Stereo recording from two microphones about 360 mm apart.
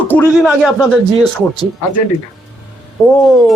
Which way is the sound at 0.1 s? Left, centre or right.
Centre.